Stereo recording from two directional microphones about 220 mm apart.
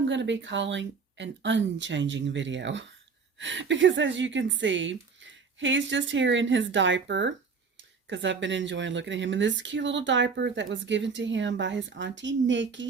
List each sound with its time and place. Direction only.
0.1 s speech: 55° right (ahead or behind)